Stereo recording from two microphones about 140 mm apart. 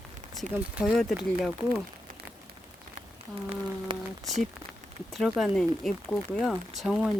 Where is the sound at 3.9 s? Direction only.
35° right (ahead or behind).